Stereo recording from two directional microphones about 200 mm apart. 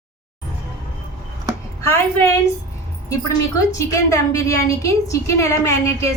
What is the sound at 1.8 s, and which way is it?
Speech, 15° left (ahead or behind).